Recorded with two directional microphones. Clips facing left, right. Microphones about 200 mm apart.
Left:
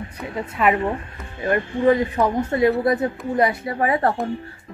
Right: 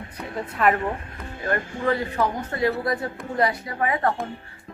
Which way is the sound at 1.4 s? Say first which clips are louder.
Left 6 dB; 15° left (ahead or behind).